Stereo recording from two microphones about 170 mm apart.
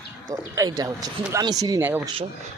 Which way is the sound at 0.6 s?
20° right (ahead or behind).